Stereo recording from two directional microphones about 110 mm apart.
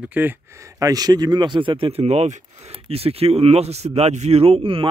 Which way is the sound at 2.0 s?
75° right (ahead or behind).